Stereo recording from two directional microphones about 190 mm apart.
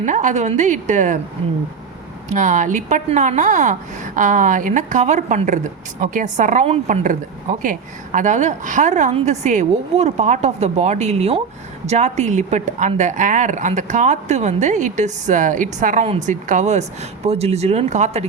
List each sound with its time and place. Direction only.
0.0 s a woman's voice: 40° right (ahead or behind)
2.3 s a woman's voice: 40° right (ahead or behind)